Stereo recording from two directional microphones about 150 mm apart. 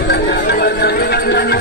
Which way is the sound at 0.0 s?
90° left.